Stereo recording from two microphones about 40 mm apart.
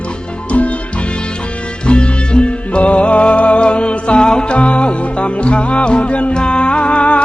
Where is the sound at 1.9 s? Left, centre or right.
Left.